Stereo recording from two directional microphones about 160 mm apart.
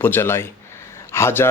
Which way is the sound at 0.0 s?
15° left (ahead or behind).